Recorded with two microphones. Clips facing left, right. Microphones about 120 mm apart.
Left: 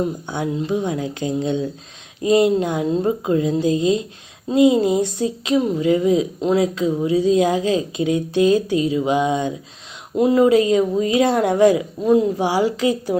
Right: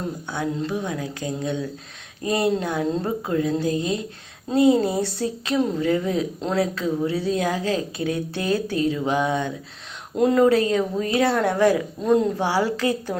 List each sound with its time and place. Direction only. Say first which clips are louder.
0.0 s a woman's voice: left 4 dB; 15° left (ahead or behind)
10.2 s a woman's voice: left 3 dB; 5° left (ahead or behind)
12.0 s a woman's voice: left 3 dB; 5° left (ahead or behind)